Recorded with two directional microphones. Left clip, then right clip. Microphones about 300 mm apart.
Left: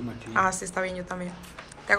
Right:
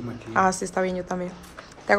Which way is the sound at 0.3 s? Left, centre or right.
Centre.